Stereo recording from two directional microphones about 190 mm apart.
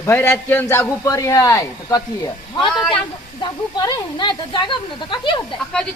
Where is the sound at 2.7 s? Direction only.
Centre (ahead or behind).